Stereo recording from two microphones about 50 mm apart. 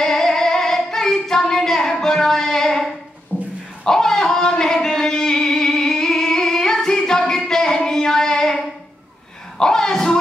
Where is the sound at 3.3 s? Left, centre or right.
Left.